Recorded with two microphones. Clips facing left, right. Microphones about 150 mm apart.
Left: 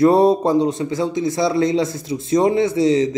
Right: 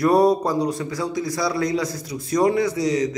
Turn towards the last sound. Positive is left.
turn(degrees=25)  # may be behind; listen again after turning